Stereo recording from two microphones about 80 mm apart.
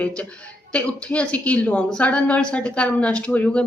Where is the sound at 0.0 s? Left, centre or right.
Centre.